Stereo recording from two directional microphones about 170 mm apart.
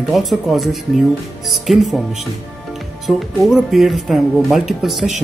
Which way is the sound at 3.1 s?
Centre (ahead or behind).